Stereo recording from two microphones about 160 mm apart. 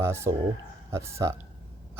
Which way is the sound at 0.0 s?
15° right (ahead or behind).